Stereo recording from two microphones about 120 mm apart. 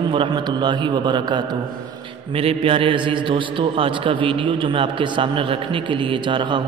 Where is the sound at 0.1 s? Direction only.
40° right (ahead or behind).